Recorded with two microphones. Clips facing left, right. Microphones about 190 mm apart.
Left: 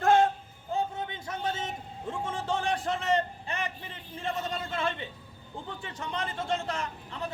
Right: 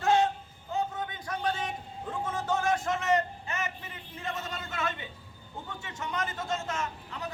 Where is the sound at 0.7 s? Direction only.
30° left (ahead or behind).